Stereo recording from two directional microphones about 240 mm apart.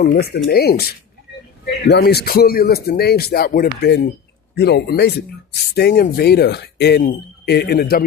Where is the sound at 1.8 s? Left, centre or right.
Left.